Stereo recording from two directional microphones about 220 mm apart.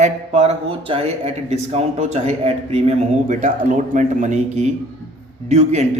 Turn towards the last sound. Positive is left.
turn(degrees=-30)  # may be behind; listen again after turning